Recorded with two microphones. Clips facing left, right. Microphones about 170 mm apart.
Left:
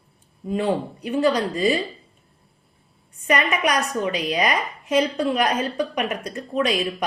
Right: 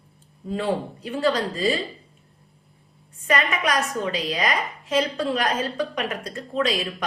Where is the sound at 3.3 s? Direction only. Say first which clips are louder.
Left 2 dB; 20° left (ahead or behind).